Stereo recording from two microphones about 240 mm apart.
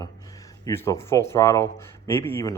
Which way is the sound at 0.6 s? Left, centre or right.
Centre.